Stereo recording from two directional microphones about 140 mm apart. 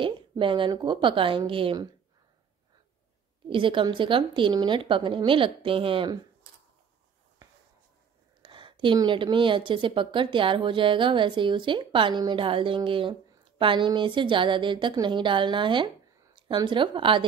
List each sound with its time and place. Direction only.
0.0 s speech: 35° right (ahead or behind)
3.4 s speech: 40° right (ahead or behind)
7.4 s a sound: 25° right (ahead or behind)
8.4 s speech: 35° right (ahead or behind)